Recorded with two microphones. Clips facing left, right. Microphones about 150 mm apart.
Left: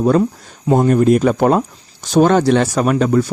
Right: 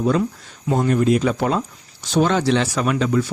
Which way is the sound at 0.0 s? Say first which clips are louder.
Left 5 dB; 45° left (ahead or behind).